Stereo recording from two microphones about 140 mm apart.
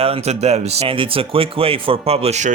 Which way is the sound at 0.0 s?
50° right (ahead or behind).